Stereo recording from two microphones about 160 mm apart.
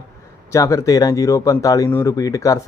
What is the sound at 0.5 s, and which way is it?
Speech, 20° left (ahead or behind).